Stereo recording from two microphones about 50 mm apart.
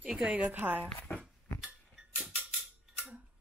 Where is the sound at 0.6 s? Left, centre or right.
Right.